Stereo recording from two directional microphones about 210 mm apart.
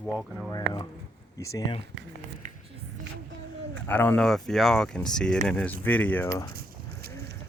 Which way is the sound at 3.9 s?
10° left (ahead or behind).